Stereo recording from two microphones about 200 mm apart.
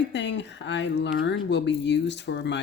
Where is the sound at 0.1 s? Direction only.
60° left (ahead or behind).